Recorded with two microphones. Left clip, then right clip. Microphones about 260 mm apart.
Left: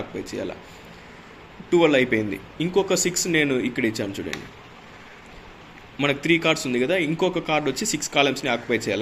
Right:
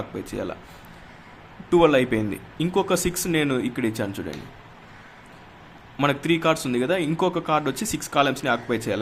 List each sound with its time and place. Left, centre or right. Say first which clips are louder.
0.3 s a man's voice: right 1 dB; right
1.7 s a man's voice: even; right
6.0 s a man's voice: left 1 dB; right